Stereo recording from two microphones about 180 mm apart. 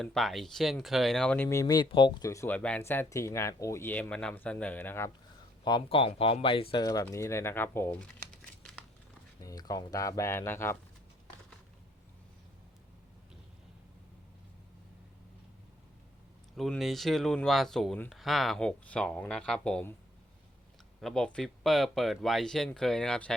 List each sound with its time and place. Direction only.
0.0 s speech: centre (ahead or behind)
5.6 s speech: 25° left (ahead or behind)
16.6 s speech: centre (ahead or behind)
21.0 s speech: 5° left (ahead or behind)